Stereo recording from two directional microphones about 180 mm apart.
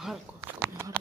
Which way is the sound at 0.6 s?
15° right (ahead or behind).